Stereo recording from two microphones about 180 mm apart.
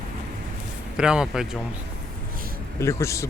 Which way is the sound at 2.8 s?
15° left (ahead or behind).